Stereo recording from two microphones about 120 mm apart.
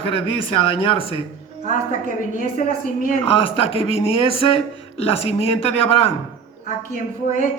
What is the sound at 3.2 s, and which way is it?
Speech, 50° left (ahead or behind).